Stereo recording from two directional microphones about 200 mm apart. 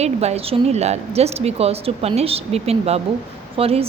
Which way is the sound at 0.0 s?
30° right (ahead or behind).